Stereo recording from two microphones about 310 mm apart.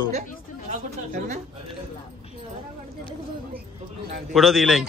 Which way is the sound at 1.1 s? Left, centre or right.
Right.